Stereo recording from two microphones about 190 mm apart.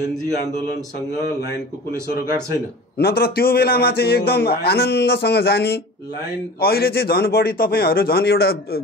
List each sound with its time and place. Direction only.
3.0 s a man's voice: 55° left (ahead or behind)